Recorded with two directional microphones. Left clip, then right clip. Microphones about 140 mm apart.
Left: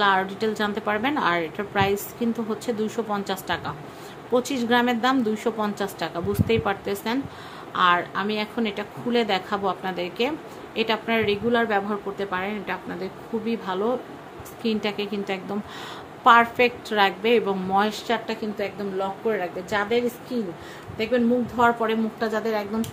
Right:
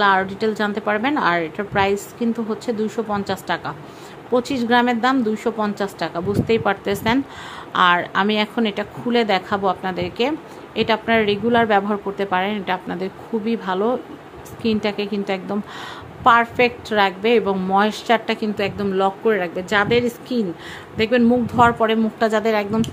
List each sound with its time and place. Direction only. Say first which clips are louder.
0.0 s a woman's voice: right 4 dB; 20° right (ahead or behind); by 22.8 s 55° right (ahead or behind)